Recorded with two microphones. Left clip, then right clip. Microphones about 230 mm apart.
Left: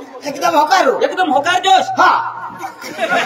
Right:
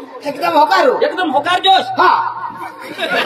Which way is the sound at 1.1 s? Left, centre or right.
Centre.